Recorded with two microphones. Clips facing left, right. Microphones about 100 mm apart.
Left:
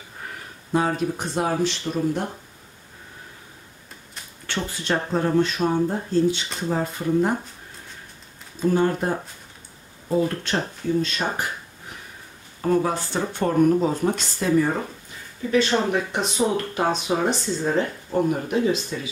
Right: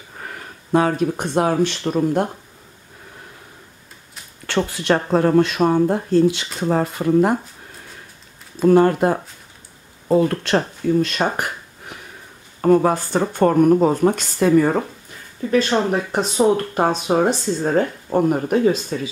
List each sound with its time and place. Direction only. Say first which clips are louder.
0.7 s speech: right 5 dB; 65° right (ahead or behind)
4.5 s speech: right 7 dB; 70° right (ahead or behind)
8.5 s speech: right 7 dB; 70° right (ahead or behind)
12.6 s speech: right 6 dB; 55° right (ahead or behind)
15.5 s speech: right 3 dB; 40° right (ahead or behind)